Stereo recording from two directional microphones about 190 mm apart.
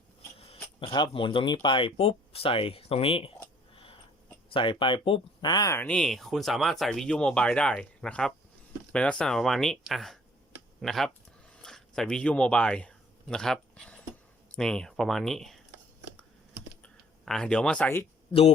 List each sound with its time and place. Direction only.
0.3 s a sound: 30° left (ahead or behind)
0.8 s speech: 25° left (ahead or behind)
4.5 s speech: 25° left (ahead or behind); by 11.1 s centre (ahead or behind)
11.5 s a sound: 5° left (ahead or behind)
14.5 s speech: 5° left (ahead or behind)
16.8 s speech: 5° left (ahead or behind)